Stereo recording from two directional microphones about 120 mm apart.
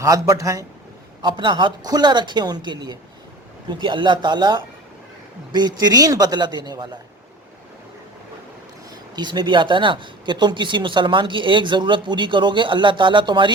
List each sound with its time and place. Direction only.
0.0 s a man's voice: 30° right (ahead or behind)
1.2 s speech: 40° right (ahead or behind)
9.1 s speech: 40° right (ahead or behind)